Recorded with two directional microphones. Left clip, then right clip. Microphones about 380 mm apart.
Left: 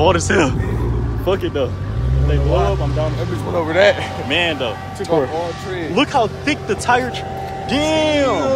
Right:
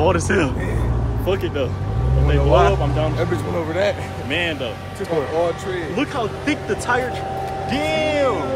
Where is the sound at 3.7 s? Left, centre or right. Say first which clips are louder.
Left 8 dB; centre.